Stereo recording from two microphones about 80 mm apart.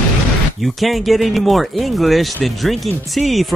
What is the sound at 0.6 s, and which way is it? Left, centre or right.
Speech, centre.